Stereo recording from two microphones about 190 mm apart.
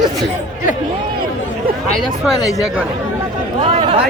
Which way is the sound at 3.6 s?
30° right (ahead or behind).